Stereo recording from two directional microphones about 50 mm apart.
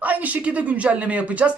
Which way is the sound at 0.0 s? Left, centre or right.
Right.